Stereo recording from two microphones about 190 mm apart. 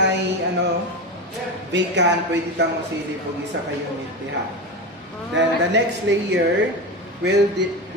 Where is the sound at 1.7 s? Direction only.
65° right (ahead or behind).